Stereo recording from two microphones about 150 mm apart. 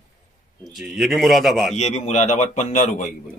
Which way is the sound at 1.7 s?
50° left (ahead or behind).